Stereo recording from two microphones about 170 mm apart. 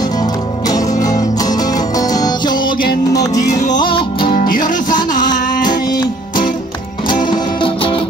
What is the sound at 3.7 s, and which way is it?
Music, 30° left (ahead or behind).